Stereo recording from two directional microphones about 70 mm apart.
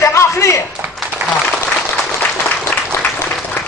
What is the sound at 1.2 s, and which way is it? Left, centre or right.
Applause, right.